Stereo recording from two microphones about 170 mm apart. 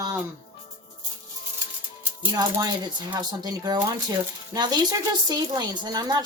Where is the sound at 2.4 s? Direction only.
20° right (ahead or behind).